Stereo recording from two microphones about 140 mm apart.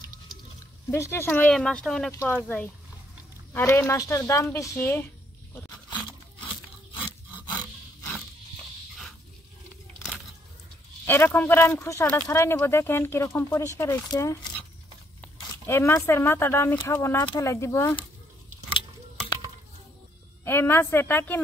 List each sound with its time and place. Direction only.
0.8 s speech: 20° left (ahead or behind)
11.1 s speech: 15° left (ahead or behind)
15.6 s speech: 20° left (ahead or behind)
18.7 s a sound: 35° left (ahead or behind)
20.4 s speech: 15° left (ahead or behind)